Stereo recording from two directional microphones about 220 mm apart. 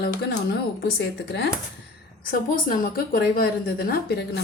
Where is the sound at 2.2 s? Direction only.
40° left (ahead or behind).